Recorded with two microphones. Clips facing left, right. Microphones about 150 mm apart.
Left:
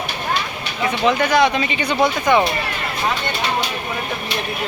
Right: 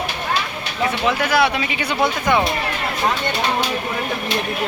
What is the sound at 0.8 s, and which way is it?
Speech, 5° right (ahead or behind).